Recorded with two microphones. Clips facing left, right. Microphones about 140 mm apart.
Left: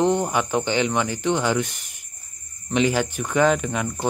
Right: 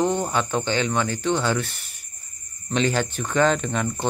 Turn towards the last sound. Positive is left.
turn(degrees=10)  # may be behind; listen again after turning